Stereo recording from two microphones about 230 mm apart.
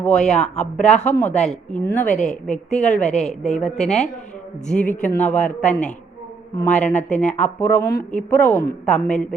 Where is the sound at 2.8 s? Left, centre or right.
Left.